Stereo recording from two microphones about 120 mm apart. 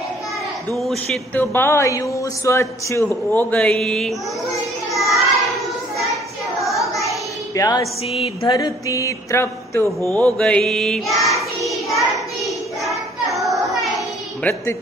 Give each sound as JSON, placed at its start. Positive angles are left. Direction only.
{"t": 0.7, "sound": "speech", "side_deg": 0}
{"t": 1.3, "sound": "a man's voice", "side_deg": 20}
{"t": 4.9, "sound": "child singing", "side_deg": 0}
{"t": 6.6, "sound": "child singing", "side_deg": 0}
{"t": 7.1, "sound": "a sound", "side_deg": 30}
{"t": 8.1, "sound": "a sound", "side_deg": 55}
{"t": 8.5, "sound": "a man's voice", "side_deg": 35}
{"t": 10.2, "sound": "child singing", "side_deg": 10}
{"t": 14.4, "sound": "a man's voice", "side_deg": 20}